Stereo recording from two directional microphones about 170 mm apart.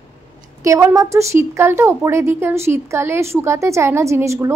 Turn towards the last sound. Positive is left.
turn(degrees=-15)  # may be behind; listen again after turning